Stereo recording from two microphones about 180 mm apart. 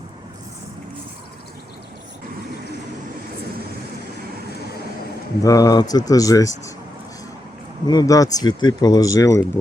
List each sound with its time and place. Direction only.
5.4 s speech: 20° left (ahead or behind)
7.9 s speech: 20° left (ahead or behind)